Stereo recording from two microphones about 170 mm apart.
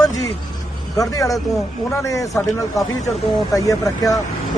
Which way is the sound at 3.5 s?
20° left (ahead or behind).